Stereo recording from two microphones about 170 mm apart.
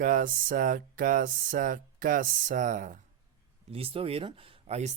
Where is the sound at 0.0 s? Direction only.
55° right (ahead or behind).